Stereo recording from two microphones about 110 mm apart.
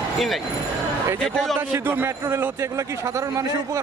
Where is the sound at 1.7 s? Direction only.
20° right (ahead or behind).